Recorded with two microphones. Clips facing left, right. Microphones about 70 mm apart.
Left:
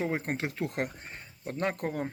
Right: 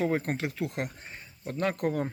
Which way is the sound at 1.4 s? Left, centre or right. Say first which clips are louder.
Right 3 dB; left.